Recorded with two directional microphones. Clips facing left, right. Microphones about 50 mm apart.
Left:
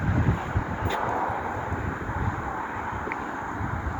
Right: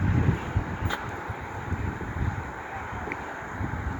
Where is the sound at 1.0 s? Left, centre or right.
Left.